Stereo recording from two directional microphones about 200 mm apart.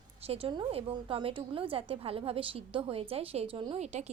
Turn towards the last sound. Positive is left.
turn(degrees=-35)  # may be behind; listen again after turning